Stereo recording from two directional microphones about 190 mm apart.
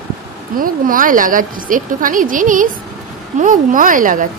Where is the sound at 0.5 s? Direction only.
45° right (ahead or behind).